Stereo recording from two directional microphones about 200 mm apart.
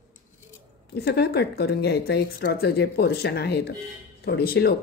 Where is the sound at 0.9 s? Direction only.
55° left (ahead or behind).